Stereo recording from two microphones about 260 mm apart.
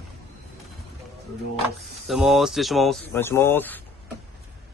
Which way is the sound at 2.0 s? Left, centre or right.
Centre.